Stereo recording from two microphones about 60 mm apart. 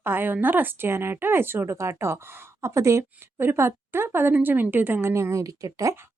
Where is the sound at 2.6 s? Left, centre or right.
Right.